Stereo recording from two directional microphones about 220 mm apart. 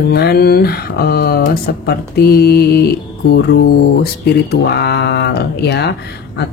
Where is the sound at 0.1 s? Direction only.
45° left (ahead or behind).